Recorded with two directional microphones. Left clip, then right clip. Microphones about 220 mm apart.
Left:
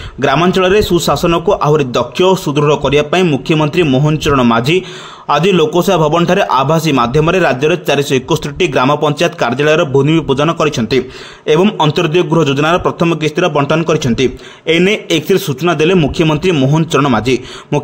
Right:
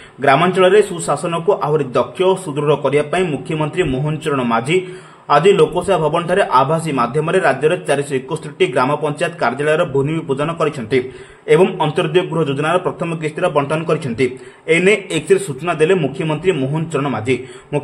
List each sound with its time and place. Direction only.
0.2 s a man's voice: 45° left (ahead or behind)